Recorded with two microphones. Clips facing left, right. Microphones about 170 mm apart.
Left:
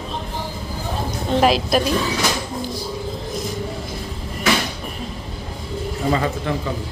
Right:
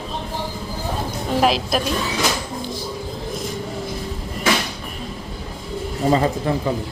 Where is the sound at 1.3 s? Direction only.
Centre (ahead or behind).